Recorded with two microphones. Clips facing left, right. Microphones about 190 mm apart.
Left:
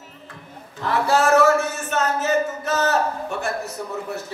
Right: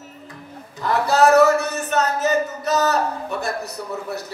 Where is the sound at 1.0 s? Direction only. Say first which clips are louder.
Right 2 dB; 40° right (ahead or behind).